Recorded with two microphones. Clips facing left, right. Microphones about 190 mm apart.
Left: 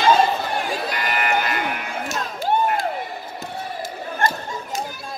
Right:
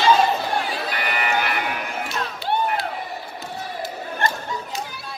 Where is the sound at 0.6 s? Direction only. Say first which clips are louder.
Left 2 dB; 45° left (ahead or behind).